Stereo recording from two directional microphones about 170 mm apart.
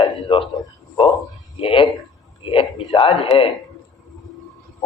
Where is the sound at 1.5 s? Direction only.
30° left (ahead or behind).